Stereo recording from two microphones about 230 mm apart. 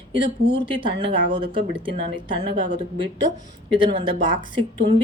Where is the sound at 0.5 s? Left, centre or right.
Right.